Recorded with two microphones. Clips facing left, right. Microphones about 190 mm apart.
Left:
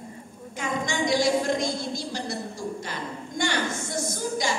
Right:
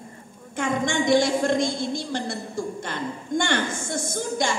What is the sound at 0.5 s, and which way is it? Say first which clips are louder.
A woman's voice: right 4 dB; 50° right (ahead or behind).